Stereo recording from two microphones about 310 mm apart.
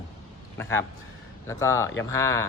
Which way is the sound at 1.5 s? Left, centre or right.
Centre.